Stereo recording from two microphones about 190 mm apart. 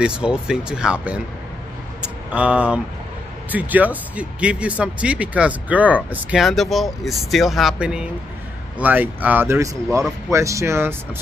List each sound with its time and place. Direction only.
0.0 s speech: 5° right (ahead or behind)
2.0 s a sound: 5° right (ahead or behind)
3.5 s speech: 10° right (ahead or behind)